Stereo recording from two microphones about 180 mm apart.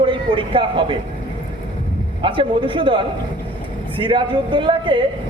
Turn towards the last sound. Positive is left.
turn(degrees=-25)  # may be behind; listen again after turning